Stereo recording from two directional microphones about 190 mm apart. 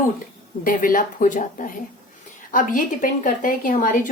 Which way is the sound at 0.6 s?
45° left (ahead or behind).